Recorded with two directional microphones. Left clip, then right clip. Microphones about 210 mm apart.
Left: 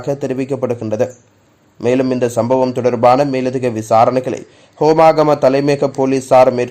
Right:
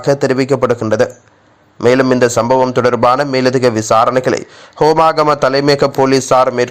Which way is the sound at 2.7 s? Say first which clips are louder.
Right 1 dB; 5° right (ahead or behind).